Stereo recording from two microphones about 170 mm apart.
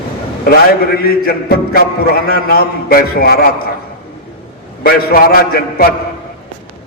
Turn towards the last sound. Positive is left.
turn(degrees=65)  # may be behind; listen again after turning